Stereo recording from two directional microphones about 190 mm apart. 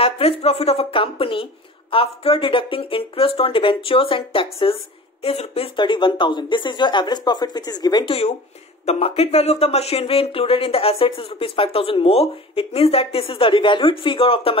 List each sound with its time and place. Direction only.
0.0 s speech: 30° left (ahead or behind)
8.8 s speech: 30° left (ahead or behind)